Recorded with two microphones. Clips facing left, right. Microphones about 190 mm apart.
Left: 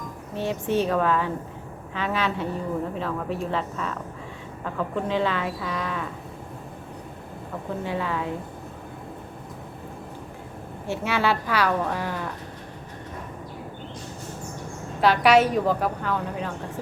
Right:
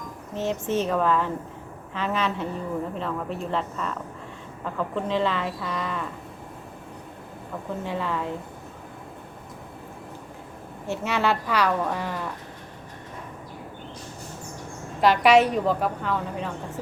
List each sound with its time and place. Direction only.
0.3 s a woman's voice: centre (ahead or behind)
7.9 s a woman's voice: centre (ahead or behind)
10.8 s a woman's voice: centre (ahead or behind)
15.0 s a woman's voice: centre (ahead or behind)